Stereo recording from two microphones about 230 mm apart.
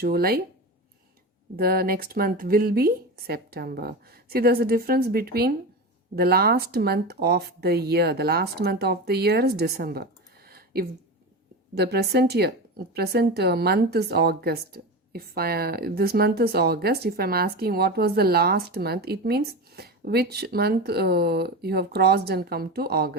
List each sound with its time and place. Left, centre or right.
0.0 s a woman's voice: right
1.5 s a woman's voice: right